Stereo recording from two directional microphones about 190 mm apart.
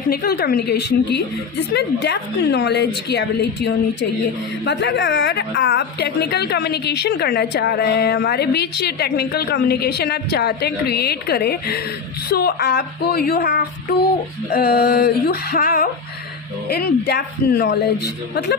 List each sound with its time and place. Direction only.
0.1 s a woman's voice: 55° left (ahead or behind)